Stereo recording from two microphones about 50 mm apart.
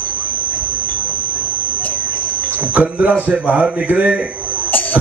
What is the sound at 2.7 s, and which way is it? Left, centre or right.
A man's voice, right.